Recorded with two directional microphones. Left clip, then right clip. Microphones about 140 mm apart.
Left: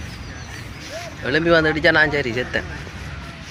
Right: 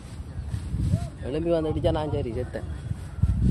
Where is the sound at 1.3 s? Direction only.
15° right (ahead or behind).